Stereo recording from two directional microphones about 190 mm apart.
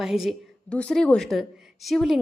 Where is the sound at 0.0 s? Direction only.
Centre (ahead or behind).